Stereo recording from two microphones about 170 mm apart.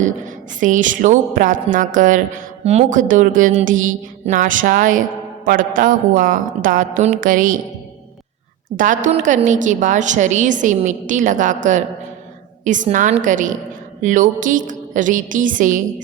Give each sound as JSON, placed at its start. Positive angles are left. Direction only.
{"t": 0.6, "sound": "a woman's voice", "side_deg": -50}
{"t": 8.7, "sound": "a woman's voice", "side_deg": -50}